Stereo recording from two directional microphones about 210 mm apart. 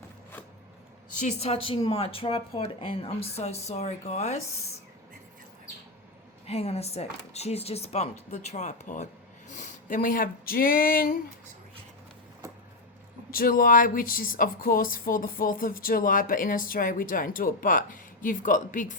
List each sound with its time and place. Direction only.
1.4 s speech: 30° left (ahead or behind)
6.5 s speech: 30° left (ahead or behind)
13.3 s speech: 40° left (ahead or behind)